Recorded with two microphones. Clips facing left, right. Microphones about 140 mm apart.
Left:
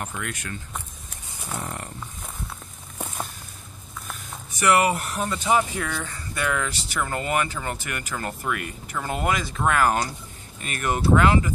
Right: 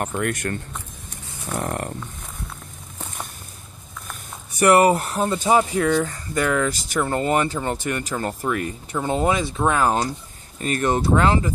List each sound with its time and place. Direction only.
0.0 s speech: 50° right (ahead or behind)
1.6 s a sound: 55° right (ahead or behind)
4.6 s speech: 35° right (ahead or behind)
8.9 s speech: 25° right (ahead or behind)